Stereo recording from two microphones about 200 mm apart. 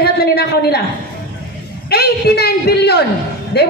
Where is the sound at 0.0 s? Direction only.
50° left (ahead or behind).